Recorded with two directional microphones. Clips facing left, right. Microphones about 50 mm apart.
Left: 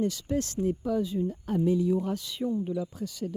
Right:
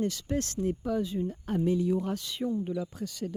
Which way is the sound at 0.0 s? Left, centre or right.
Right.